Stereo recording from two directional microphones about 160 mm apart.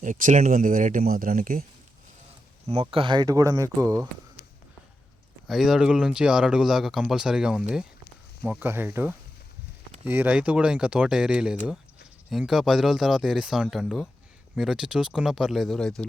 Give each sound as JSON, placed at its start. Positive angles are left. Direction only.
{"t": 0.0, "sound": "speech", "side_deg": -55}
{"t": 2.8, "sound": "speech", "side_deg": -30}
{"t": 5.5, "sound": "speech", "side_deg": 0}